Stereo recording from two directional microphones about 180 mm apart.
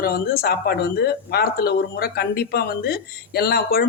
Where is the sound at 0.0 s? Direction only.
55° left (ahead or behind).